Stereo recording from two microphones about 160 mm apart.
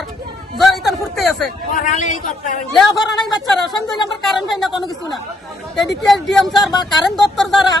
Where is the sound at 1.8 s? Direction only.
55° left (ahead or behind).